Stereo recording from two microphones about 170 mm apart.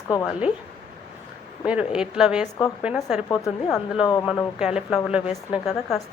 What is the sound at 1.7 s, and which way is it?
A woman's voice, 5° right (ahead or behind).